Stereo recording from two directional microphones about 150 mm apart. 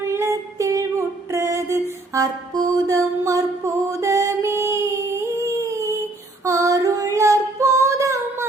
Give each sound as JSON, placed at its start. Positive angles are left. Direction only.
{"t": 0.0, "sound": "music", "side_deg": -20}
{"t": 3.8, "sound": "singing", "side_deg": -20}
{"t": 6.4, "sound": "female singing", "side_deg": -20}